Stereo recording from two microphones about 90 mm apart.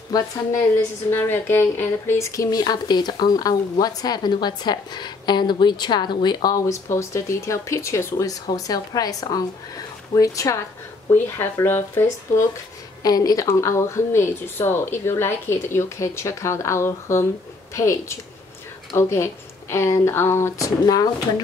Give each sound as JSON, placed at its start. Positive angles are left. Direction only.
{"t": 0.1, "sound": "speech", "side_deg": 45}
{"t": 1.1, "sound": "speech", "side_deg": 25}
{"t": 13.0, "sound": "speech", "side_deg": 45}
{"t": 13.5, "sound": "speech", "side_deg": 30}